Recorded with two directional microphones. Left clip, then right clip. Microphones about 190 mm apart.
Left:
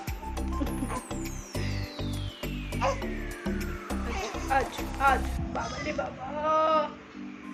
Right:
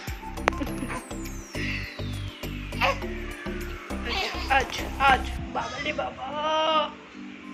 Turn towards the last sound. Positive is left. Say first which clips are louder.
# right 1 dB
turn(degrees=0)  # may be behind; listen again after turning